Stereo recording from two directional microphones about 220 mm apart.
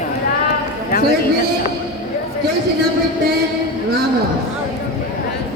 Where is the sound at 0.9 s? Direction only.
40° left (ahead or behind).